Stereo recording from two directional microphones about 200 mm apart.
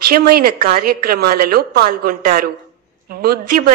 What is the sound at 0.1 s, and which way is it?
A woman's voice, 50° right (ahead or behind).